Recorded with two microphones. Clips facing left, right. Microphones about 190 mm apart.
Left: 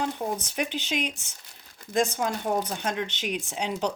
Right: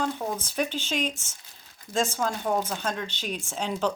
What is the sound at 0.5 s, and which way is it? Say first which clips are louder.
Speech: right 1 dB; 15° left (ahead or behind).